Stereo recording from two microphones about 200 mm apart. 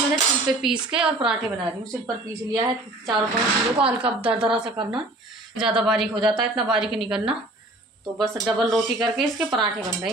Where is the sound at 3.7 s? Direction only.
5° right (ahead or behind).